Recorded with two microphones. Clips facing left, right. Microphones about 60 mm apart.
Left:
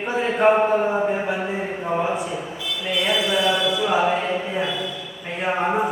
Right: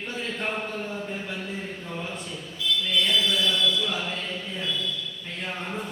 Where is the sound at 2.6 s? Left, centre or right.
Left.